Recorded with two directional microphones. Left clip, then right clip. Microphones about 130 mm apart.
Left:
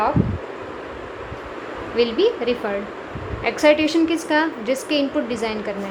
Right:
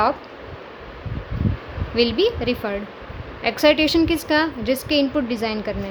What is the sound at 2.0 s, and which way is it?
A woman's voice, 35° right (ahead or behind).